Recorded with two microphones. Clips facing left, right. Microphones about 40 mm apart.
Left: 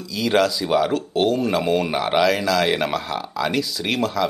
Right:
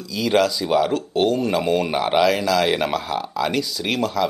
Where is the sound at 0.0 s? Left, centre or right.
Centre.